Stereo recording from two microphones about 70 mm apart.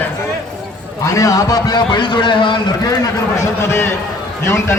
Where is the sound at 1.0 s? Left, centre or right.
Left.